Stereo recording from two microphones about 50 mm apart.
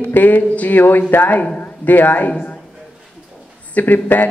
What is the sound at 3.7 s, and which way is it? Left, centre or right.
Speech, left.